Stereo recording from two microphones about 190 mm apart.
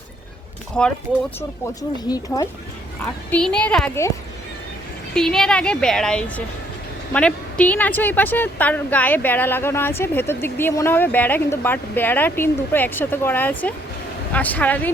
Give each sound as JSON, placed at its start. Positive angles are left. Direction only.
{"t": 0.8, "sound": "speech", "side_deg": 5}
{"t": 2.0, "sound": "speech", "side_deg": 20}
{"t": 3.2, "sound": "speech", "side_deg": 5}
{"t": 5.1, "sound": "speech", "side_deg": 5}